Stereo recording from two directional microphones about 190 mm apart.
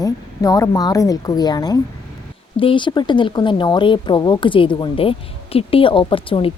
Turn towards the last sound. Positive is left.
turn(degrees=30)  # may be behind; listen again after turning